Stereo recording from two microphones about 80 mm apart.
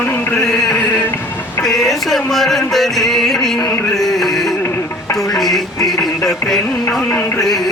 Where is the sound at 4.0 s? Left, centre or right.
Centre.